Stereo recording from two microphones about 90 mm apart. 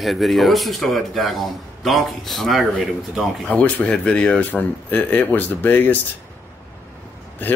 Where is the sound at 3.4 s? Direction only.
15° left (ahead or behind).